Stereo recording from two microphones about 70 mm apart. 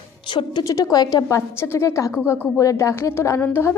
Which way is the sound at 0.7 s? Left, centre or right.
Left.